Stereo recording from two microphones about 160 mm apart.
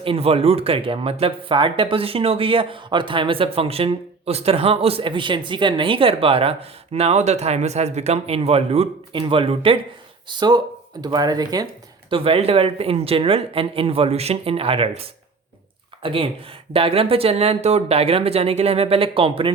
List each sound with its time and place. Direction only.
0.0 s speech: 35° right (ahead or behind)
12.1 s speech: 35° right (ahead or behind)
16.0 s speech: 35° right (ahead or behind)